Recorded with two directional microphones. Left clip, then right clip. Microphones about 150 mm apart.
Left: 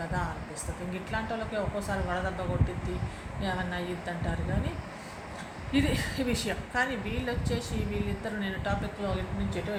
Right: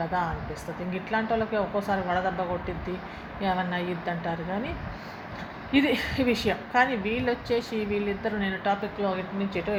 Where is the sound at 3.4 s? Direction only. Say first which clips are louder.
Right 6 dB; 30° right (ahead or behind).